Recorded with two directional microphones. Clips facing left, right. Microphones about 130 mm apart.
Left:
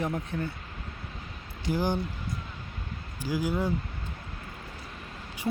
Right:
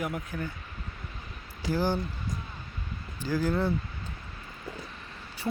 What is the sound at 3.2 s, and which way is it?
Speech, 10° left (ahead or behind).